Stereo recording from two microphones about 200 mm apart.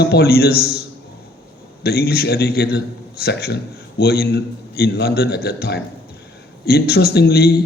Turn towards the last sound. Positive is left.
turn(degrees=50)  # may be behind; listen again after turning